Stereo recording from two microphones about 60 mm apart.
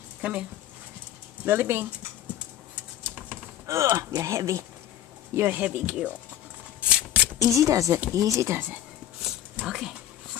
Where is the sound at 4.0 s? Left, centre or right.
Right.